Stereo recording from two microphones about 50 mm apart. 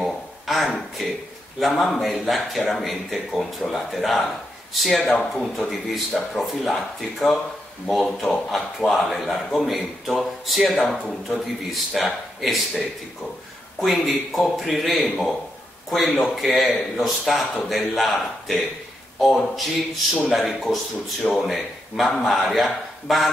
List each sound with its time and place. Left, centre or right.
0.0 s a sound: centre
1.6 s a man's voice: centre
11.0 s speech: centre
11.3 s a man's voice: centre